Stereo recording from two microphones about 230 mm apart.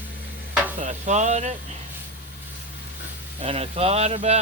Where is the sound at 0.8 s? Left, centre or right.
Right.